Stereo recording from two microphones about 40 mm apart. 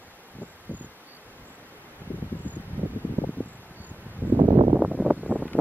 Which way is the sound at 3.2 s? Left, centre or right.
Right.